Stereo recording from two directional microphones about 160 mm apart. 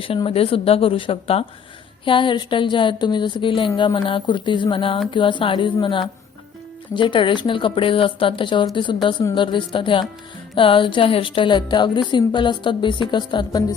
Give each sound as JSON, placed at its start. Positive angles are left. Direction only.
{"t": 0.0, "sound": "a woman's voice", "side_deg": 35}